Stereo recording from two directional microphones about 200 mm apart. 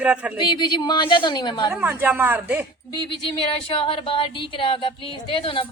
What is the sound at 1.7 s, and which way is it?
Speech, 10° right (ahead or behind).